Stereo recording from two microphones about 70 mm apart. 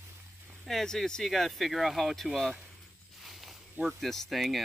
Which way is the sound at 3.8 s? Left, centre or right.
Centre.